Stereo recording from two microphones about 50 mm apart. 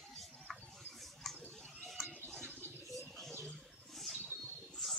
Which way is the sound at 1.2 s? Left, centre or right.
Centre.